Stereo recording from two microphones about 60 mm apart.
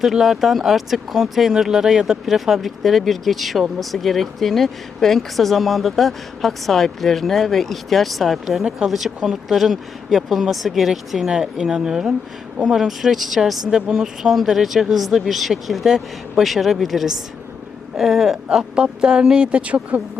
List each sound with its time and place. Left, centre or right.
0.0 s speech: centre
18.4 s speech: centre